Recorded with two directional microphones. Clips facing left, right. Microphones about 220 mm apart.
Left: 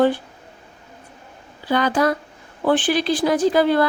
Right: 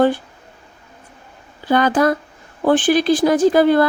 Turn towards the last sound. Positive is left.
turn(degrees=-50)  # may be behind; listen again after turning